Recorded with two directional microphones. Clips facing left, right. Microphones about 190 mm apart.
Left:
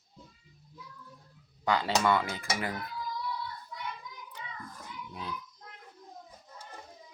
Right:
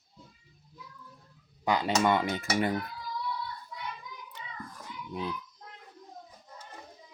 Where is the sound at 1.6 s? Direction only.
15° right (ahead or behind).